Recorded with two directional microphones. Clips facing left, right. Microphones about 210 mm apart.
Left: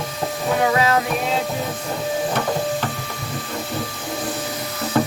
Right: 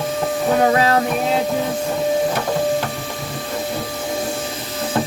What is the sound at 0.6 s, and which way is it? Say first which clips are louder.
Music: right 2 dB; 35° right (ahead or behind).